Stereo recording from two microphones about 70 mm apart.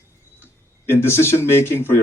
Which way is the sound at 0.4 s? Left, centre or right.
Left.